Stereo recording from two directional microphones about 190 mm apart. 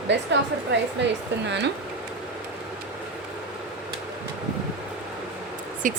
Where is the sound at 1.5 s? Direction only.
65° right (ahead or behind).